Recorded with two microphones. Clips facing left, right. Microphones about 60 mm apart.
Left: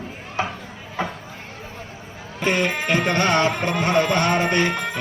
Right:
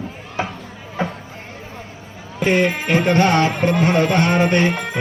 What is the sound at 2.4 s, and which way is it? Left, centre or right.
Speech, centre.